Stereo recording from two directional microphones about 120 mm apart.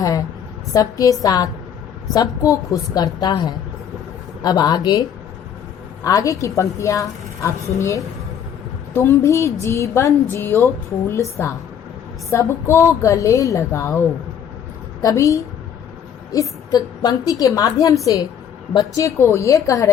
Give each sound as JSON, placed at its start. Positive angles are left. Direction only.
{"t": 0.0, "sound": "a sound", "side_deg": 30}
{"t": 0.7, "sound": "a woman's voice", "side_deg": 30}
{"t": 6.1, "sound": "a woman's voice", "side_deg": 25}
{"t": 15.0, "sound": "a woman's voice", "side_deg": 25}